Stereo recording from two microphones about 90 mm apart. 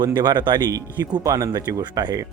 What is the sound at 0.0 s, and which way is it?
Speech, 55° right (ahead or behind).